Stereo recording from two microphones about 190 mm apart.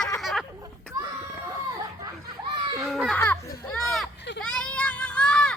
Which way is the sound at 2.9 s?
Centre (ahead or behind).